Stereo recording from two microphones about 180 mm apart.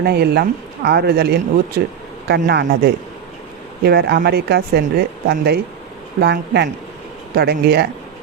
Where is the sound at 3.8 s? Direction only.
60° right (ahead or behind).